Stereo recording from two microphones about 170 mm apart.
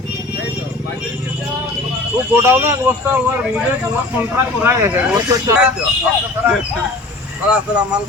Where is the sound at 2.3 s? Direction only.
15° right (ahead or behind).